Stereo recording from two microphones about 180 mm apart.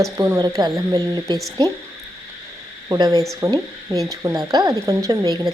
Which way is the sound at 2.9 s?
20° right (ahead or behind).